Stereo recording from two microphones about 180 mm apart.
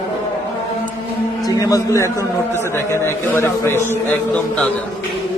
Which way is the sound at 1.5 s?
20° left (ahead or behind).